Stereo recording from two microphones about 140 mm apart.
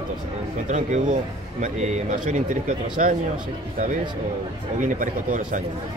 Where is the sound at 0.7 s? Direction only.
60° right (ahead or behind).